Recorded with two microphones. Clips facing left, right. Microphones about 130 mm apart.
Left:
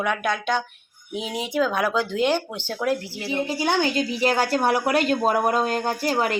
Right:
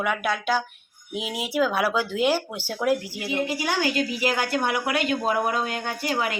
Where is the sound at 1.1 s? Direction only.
5° right (ahead or behind).